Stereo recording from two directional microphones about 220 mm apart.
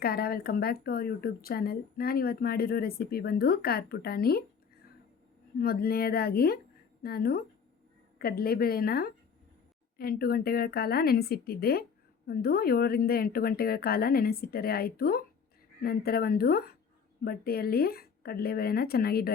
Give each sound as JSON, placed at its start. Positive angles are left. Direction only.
{"t": 0.0, "sound": "speech", "side_deg": 45}
{"t": 5.5, "sound": "speech", "side_deg": 45}